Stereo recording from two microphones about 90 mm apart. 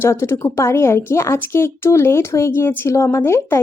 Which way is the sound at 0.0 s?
30° left (ahead or behind).